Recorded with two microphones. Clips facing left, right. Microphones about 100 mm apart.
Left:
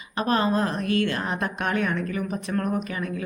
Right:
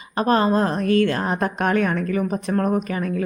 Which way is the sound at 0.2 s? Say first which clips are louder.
Right 5 dB; 40° right (ahead or behind).